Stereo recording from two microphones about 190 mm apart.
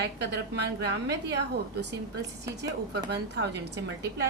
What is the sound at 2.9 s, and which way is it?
A woman's voice, 60° right (ahead or behind).